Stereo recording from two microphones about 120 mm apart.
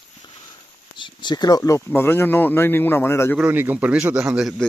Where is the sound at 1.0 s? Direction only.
40° left (ahead or behind).